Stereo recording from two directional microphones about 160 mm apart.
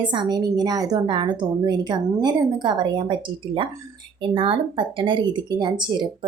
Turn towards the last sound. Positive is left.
turn(degrees=-25)  # may be behind; listen again after turning